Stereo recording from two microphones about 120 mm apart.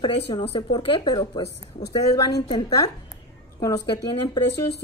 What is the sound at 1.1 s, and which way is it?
Speech, 35° left (ahead or behind).